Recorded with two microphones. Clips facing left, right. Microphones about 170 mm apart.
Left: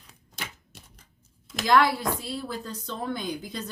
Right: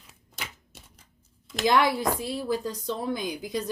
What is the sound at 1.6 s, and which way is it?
Speech, 20° right (ahead or behind).